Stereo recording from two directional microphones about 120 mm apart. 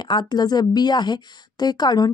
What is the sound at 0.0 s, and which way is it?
A woman's voice, 40° left (ahead or behind).